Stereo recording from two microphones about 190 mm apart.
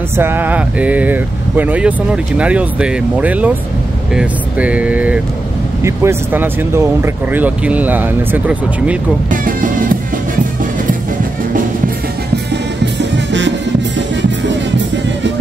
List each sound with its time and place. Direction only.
0.2 s speech: 10° right (ahead or behind)
9.3 s speech: 45° right (ahead or behind)
12.8 s music: 70° right (ahead or behind)